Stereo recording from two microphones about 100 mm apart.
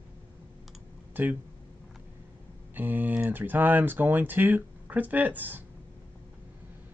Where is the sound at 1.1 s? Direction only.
15° right (ahead or behind).